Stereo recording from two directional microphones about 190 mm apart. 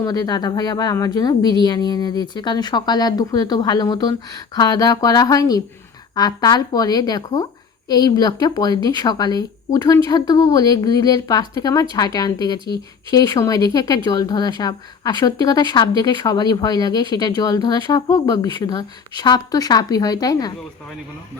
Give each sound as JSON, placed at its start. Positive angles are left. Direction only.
{"t": 0.0, "sound": "speech", "side_deg": 20}